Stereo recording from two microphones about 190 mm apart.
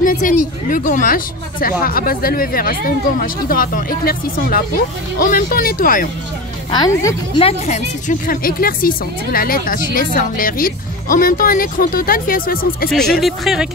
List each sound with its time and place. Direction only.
0.0 s speech: 45° left (ahead or behind)
6.7 s speech: 20° left (ahead or behind)
7.3 s speech: 35° left (ahead or behind); by 12.9 s 50° left (ahead or behind)
13.2 s speech: centre (ahead or behind)